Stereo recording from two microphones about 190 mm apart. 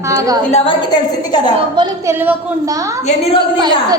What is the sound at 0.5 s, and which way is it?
Speech, 25° left (ahead or behind).